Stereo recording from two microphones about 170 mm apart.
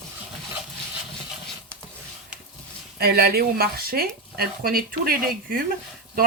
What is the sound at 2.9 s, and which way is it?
Speech, 65° right (ahead or behind).